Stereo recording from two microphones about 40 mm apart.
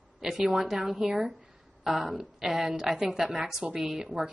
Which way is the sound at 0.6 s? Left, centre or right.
Centre.